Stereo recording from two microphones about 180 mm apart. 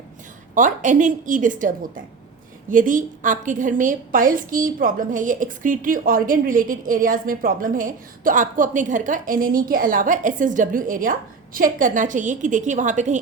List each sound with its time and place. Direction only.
0.5 s a woman's voice: 45° right (ahead or behind)